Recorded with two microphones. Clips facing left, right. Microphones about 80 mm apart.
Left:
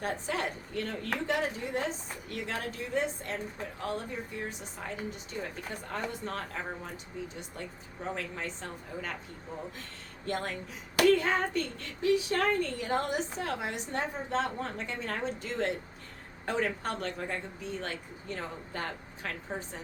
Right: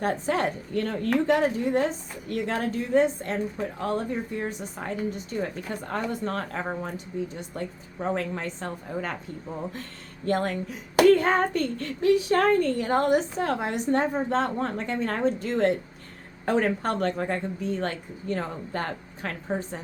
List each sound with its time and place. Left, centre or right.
0.0 s a woman's voice: right
10.2 s speech: right